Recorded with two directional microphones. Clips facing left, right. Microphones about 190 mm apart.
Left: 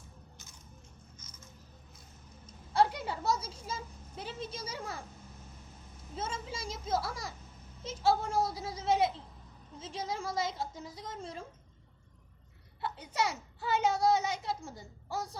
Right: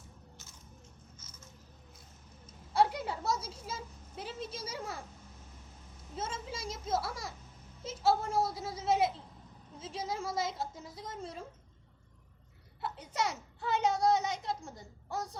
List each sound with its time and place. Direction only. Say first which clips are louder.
1.2 s a sound: left 1 dB; 15° left (ahead or behind)
2.7 s a woman's voice: even; centre (ahead or behind)
6.1 s a woman's voice: left 1 dB; centre (ahead or behind)
12.8 s a woman's voice: left 1 dB; centre (ahead or behind)